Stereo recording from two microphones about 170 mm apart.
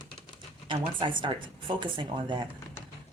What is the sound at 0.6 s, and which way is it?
Speech, 30° right (ahead or behind).